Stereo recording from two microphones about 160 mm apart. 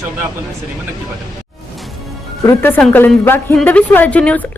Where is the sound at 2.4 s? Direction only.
10° left (ahead or behind).